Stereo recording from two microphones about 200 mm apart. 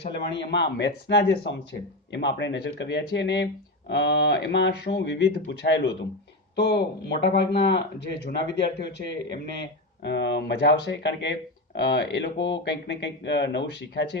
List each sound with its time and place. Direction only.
0.3 s a man's voice: 60° left (ahead or behind)
7.5 s speech: 30° left (ahead or behind)
7.9 s a man's voice: 55° left (ahead or behind)